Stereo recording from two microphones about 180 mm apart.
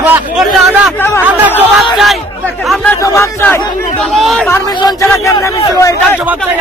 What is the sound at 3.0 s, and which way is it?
Speech, 15° left (ahead or behind).